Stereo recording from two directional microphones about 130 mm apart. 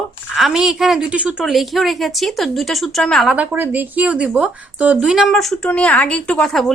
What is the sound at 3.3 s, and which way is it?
A woman's voice, 10° right (ahead or behind).